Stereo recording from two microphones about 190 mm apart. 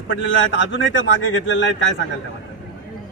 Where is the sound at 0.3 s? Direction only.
75° left (ahead or behind).